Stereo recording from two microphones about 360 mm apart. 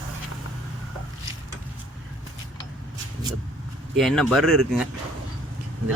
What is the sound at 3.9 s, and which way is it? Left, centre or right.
Speech, centre.